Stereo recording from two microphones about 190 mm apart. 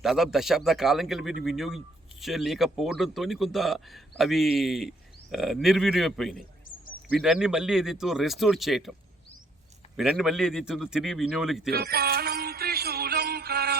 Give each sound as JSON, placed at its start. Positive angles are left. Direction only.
{"t": 0.0, "sound": "a man's voice", "side_deg": 0}
{"t": 10.0, "sound": "a man's voice", "side_deg": 0}
{"t": 11.7, "sound": "music", "side_deg": -55}